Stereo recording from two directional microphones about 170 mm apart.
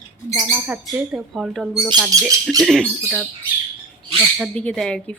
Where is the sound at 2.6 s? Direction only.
Centre (ahead or behind).